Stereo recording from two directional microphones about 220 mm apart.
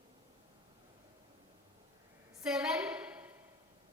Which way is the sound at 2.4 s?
5° right (ahead or behind).